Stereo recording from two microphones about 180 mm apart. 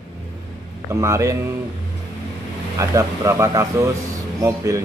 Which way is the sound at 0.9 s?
15° right (ahead or behind).